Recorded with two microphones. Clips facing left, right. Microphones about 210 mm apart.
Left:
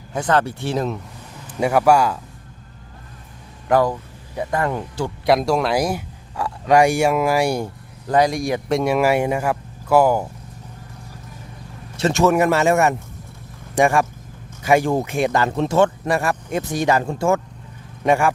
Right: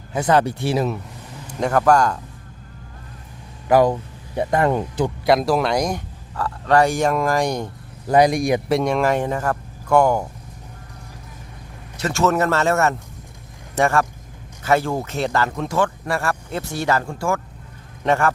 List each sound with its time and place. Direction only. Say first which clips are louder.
0.1 s speech: right 2 dB; 10° right (ahead or behind)
1.5 s speech: left 1 dB; 10° left (ahead or behind)
3.7 s speech: right 2 dB; 5° right (ahead or behind)
4.4 s speech: right 4 dB; 25° right (ahead or behind)
5.2 s speech: left 1 dB; centre (ahead or behind)
8.1 s speech: right 2 dB; 15° right (ahead or behind)
8.7 s speech: left 4 dB; 5° left (ahead or behind)
11.9 s speech: left 5 dB; 25° left (ahead or behind)
12.2 s speech: left 2 dB; 10° left (ahead or behind)
18.0 s speech: left 2 dB; 10° left (ahead or behind)